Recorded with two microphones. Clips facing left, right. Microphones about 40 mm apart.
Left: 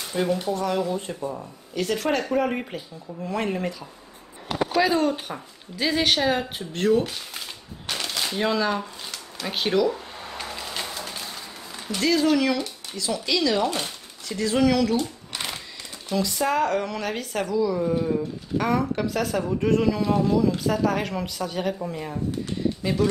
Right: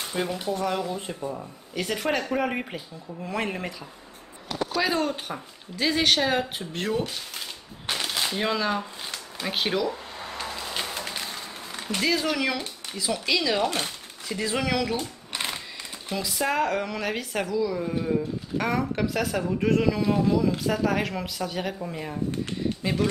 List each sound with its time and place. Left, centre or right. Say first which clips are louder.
0.1 s speech: left 5 dB; centre
1.2 s speech: left 2 dB; centre
1.8 s speech: left 2 dB; centre
4.8 s speech: left 4 dB; centre
7.8 s a sound: right 1 dB; centre
8.3 s speech: left 4 dB; centre
10.6 s music: even; centre
11.0 s a sound: right 1 dB; right
12.0 s speech: left 5 dB; centre
22.8 s speech: left 2 dB; centre